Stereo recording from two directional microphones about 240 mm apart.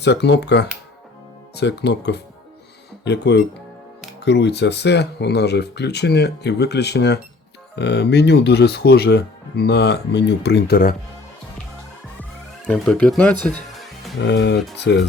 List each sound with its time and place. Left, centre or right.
0.0 s speech: left
12.6 s speech: centre
14.2 s speech: left